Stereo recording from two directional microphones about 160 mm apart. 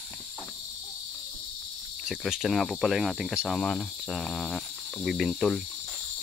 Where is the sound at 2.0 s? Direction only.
5° right (ahead or behind).